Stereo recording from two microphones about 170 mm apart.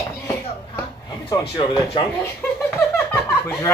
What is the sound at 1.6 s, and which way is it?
Speech, 30° left (ahead or behind).